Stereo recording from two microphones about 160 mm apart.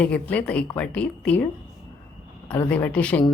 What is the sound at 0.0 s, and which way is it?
Speech, 10° left (ahead or behind).